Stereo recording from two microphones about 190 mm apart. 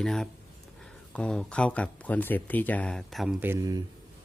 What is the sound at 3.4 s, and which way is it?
Speech, 15° right (ahead or behind).